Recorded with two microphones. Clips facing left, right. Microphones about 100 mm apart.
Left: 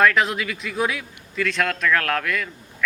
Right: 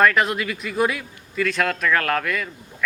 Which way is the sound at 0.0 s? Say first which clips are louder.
Even; centre (ahead or behind).